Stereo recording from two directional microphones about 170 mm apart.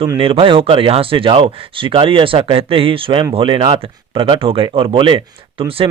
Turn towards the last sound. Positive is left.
turn(degrees=-30)  # may be behind; listen again after turning